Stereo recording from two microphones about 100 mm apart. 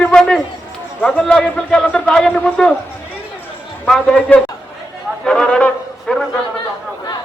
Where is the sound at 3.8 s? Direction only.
5° left (ahead or behind).